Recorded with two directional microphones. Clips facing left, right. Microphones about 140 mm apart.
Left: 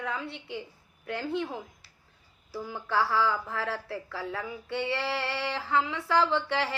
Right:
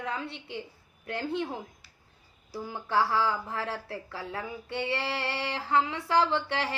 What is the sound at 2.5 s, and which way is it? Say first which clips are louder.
A woman's voice: even; 15° right (ahead or behind).